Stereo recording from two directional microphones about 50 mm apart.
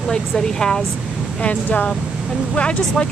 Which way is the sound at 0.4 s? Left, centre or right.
Centre.